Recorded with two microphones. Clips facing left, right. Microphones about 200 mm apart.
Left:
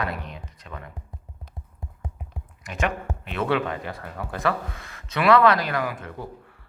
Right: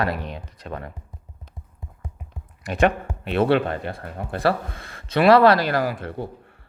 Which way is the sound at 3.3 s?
35° right (ahead or behind).